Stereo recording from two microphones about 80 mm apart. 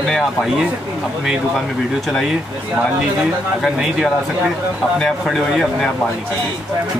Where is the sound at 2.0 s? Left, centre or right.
Centre.